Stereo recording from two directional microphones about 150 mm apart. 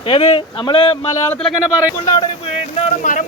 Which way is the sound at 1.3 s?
5° left (ahead or behind).